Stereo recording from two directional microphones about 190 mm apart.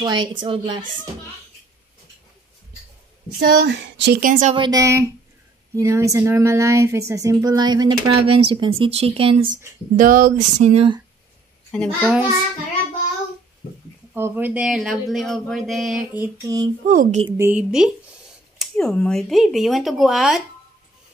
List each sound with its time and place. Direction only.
0.0 s speech: 25° right (ahead or behind)
3.3 s a sound: 60° right (ahead or behind)
4.2 s speech: 40° right (ahead or behind)
4.6 s speech: 20° right (ahead or behind)
9.9 s speech: 45° right (ahead or behind)
12.0 s speech: 5° right (ahead or behind)
14.1 s speech: 10° right (ahead or behind)
16.8 s speech: 45° right (ahead or behind)
17.4 s speech: 10° right (ahead or behind)